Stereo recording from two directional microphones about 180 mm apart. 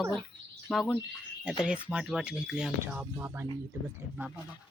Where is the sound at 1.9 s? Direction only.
5° right (ahead or behind).